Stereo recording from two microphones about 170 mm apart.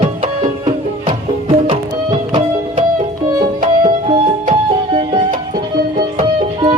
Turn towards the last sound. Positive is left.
turn(degrees=-30)  # may be behind; listen again after turning